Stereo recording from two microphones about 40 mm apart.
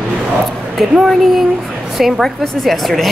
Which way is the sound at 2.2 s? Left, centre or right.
Centre.